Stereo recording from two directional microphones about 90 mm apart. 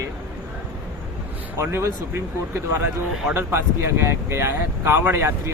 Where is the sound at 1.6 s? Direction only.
30° right (ahead or behind).